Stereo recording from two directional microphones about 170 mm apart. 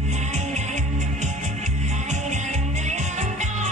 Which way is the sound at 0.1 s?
45° right (ahead or behind).